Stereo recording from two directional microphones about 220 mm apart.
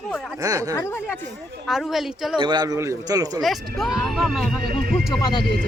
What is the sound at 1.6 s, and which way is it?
Speech, centre (ahead or behind).